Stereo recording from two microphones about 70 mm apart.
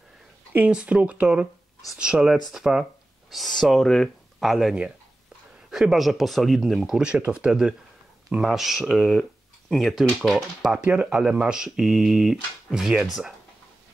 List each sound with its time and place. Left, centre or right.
0.7 s speech: centre
6.8 s speech: centre
10.8 s speech: centre